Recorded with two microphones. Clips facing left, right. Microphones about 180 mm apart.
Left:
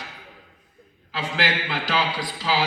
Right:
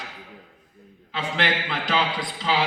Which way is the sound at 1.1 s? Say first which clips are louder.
Even; centre (ahead or behind).